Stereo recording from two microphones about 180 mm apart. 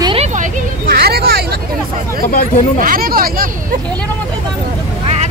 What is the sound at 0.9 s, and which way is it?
Hubbub, 60° right (ahead or behind).